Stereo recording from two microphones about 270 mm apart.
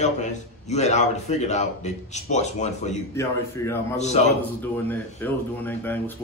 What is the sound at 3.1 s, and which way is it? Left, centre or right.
Speech, centre.